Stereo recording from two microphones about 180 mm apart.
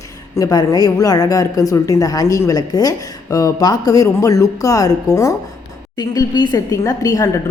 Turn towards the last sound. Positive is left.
turn(degrees=20)  # may be behind; listen again after turning